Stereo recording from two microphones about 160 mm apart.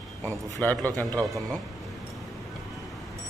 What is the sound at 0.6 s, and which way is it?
Speech, 10° left (ahead or behind).